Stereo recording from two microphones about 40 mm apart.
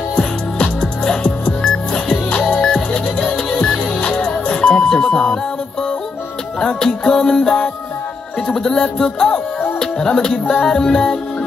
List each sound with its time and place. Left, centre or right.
0.1 s music: left
6.6 s music: centre